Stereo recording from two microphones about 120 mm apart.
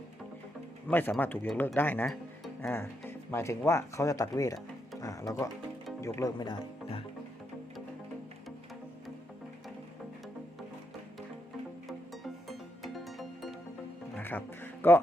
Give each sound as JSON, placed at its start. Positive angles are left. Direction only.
{"t": 0.9, "sound": "speech", "side_deg": 15}
{"t": 6.3, "sound": "speech", "side_deg": 40}
{"t": 11.9, "sound": "music", "side_deg": 0}
{"t": 14.2, "sound": "music", "side_deg": 15}